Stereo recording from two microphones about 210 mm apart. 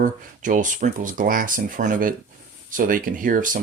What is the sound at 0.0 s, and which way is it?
Speech, 40° right (ahead or behind).